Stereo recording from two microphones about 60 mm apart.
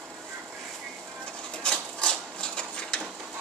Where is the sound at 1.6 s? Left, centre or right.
Centre.